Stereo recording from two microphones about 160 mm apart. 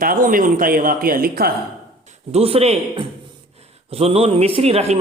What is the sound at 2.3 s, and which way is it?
A man's voice, 40° right (ahead or behind).